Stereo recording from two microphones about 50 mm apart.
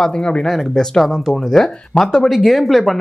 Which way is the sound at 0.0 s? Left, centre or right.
Centre.